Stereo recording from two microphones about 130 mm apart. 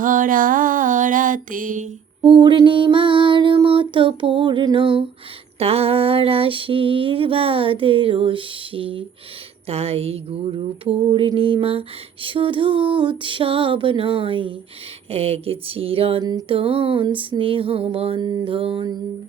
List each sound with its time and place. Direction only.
0.0 s a sound: 90° right
2.2 s child singing: 40° right (ahead or behind)
5.5 s mantra: 50° right (ahead or behind)
18.2 s child singing: 30° right (ahead or behind)
18.4 s child singing: 45° right (ahead or behind)